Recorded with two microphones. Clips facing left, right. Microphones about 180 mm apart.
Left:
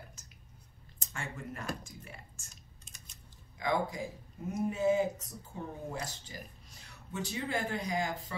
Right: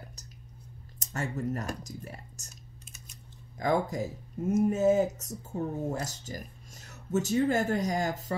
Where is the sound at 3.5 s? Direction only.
45° right (ahead or behind).